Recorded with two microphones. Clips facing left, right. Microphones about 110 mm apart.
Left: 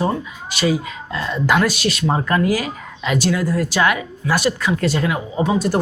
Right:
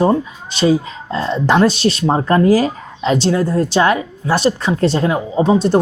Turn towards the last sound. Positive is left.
turn(degrees=-25)  # may be behind; listen again after turning